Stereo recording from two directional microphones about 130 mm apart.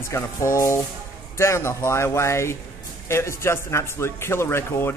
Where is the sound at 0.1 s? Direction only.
20° left (ahead or behind).